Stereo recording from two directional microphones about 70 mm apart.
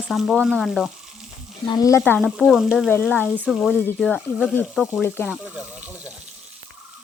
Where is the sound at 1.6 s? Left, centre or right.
Left.